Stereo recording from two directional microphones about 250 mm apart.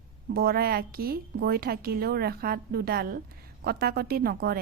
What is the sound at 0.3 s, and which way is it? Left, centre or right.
A woman's voice, right.